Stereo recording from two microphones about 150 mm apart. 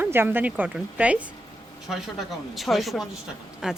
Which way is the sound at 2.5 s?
Centre (ahead or behind).